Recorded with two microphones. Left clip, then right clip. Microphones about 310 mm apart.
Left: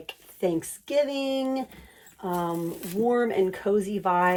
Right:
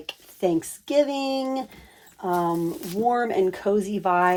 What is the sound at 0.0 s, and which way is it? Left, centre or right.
Speech, right.